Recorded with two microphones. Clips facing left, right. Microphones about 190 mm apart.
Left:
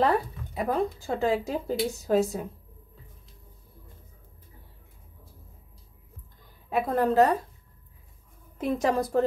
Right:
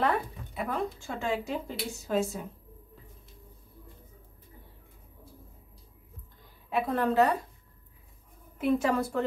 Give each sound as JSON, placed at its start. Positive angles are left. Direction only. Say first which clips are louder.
{"t": 0.0, "sound": "speech", "louder": "left 4 dB", "side_deg": 35}
{"t": 6.7, "sound": "speech", "louder": "left 3 dB", "side_deg": 40}
{"t": 8.5, "sound": "speech", "louder": "left 1 dB", "side_deg": 35}